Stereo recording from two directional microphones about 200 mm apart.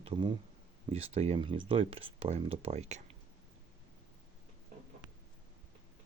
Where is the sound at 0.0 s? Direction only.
25° right (ahead or behind).